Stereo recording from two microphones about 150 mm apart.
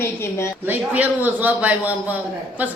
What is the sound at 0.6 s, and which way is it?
A man's voice, 10° right (ahead or behind).